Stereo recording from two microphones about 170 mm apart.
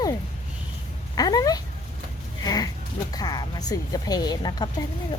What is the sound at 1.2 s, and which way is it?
Speech, 20° left (ahead or behind).